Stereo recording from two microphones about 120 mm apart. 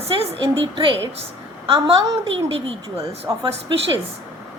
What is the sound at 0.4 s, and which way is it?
A woman's voice, 50° right (ahead or behind).